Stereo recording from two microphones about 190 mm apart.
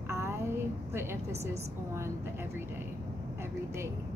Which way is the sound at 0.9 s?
15° right (ahead or behind).